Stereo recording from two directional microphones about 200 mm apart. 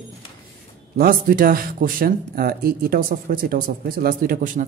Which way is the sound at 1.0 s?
45° right (ahead or behind).